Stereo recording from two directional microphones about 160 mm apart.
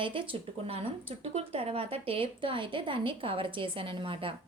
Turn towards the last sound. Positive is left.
turn(degrees=-35)  # may be behind; listen again after turning